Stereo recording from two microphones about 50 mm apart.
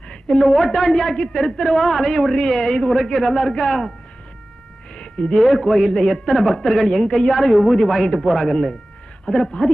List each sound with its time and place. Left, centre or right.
0.1 s a woman's voice: centre
4.9 s a sound: centre
5.4 s a woman's voice: centre